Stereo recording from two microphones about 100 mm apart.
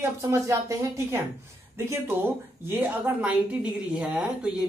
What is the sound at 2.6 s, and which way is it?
A woman's voice, 20° right (ahead or behind).